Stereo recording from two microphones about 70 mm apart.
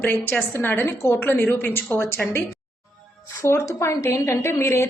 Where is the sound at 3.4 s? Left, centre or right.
Left.